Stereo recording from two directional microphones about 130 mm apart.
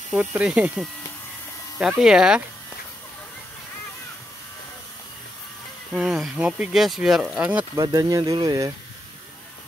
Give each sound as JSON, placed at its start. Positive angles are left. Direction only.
{"t": 0.1, "sound": "speech", "side_deg": -10}
{"t": 5.9, "sound": "speech", "side_deg": -5}
{"t": 7.7, "sound": "speech", "side_deg": -25}